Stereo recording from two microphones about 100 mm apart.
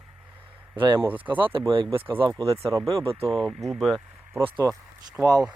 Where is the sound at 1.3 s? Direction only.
60° right (ahead or behind).